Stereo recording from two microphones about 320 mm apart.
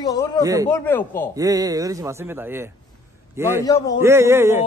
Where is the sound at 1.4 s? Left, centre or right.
Centre.